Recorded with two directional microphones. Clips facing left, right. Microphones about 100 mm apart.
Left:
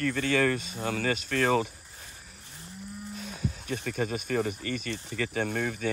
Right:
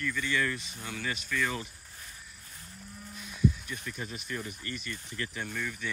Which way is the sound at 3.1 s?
45° left (ahead or behind).